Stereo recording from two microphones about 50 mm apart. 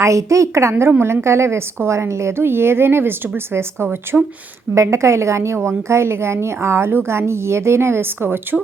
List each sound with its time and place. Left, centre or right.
0.0 s a woman's voice: right
0.9 s a woman's voice: right
2.4 s a woman's voice: right
4.1 s speech: centre
4.7 s a woman's voice: right
5.6 s a woman's voice: right